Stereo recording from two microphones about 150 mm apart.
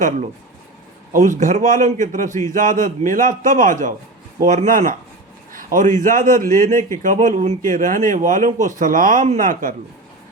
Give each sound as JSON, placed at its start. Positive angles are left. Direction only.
{"t": 1.1, "sound": "a man's voice", "side_deg": -60}